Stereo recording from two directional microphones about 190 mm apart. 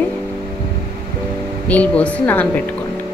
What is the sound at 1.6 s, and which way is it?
Speech, 10° left (ahead or behind).